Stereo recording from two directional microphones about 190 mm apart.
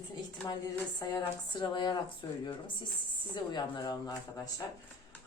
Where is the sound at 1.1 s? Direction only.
20° left (ahead or behind).